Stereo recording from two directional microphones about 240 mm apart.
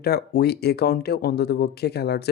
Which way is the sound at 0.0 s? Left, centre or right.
Left.